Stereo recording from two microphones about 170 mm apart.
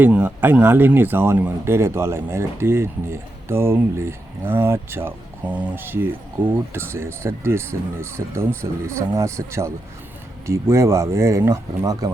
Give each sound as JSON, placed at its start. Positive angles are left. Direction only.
{"t": 0.0, "sound": "speech", "side_deg": -10}